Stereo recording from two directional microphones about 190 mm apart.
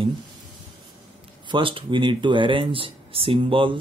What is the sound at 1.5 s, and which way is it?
Speech, 25° right (ahead or behind).